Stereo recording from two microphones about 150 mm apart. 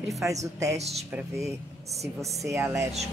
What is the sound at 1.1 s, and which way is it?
Speech, 20° right (ahead or behind).